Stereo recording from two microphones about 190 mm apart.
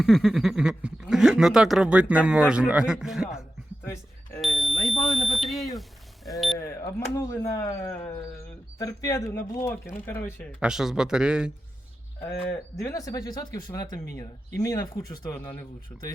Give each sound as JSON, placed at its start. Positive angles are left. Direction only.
{"t": 0.0, "sound": "speech", "side_deg": 0}
{"t": 4.4, "sound": "smoke detector", "side_deg": 0}
{"t": 6.6, "sound": "a sound", "side_deg": 15}
{"t": 8.8, "sound": "speech", "side_deg": 20}
{"t": 10.6, "sound": "speech", "side_deg": -5}
{"t": 12.7, "sound": "speech", "side_deg": 15}